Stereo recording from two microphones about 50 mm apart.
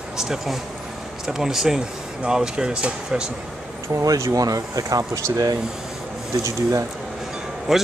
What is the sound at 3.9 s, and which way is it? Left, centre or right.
Speech, right.